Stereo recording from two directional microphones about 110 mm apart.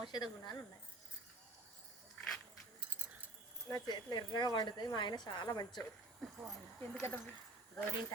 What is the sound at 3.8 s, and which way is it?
Speech, 40° left (ahead or behind).